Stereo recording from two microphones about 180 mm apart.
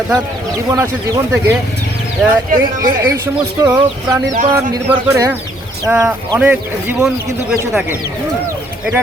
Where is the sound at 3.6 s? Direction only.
15° right (ahead or behind).